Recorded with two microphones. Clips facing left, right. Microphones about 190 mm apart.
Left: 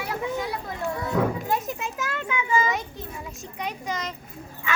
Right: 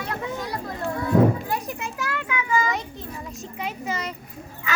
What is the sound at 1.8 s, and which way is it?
Speech, 20° left (ahead or behind).